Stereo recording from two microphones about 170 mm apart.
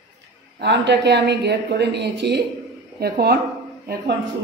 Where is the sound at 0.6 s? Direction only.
90° right; by 3.3 s 70° right (ahead or behind).